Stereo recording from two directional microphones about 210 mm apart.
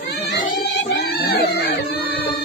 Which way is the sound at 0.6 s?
50° left (ahead or behind).